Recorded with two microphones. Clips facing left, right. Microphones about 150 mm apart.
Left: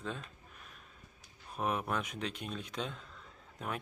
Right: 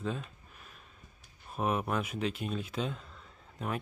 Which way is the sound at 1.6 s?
5° right (ahead or behind).